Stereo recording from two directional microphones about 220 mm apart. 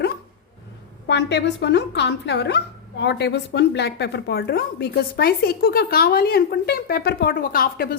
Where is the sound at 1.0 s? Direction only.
50° left (ahead or behind).